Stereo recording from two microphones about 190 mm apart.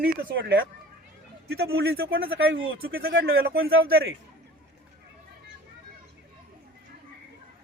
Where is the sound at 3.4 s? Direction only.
55° right (ahead or behind).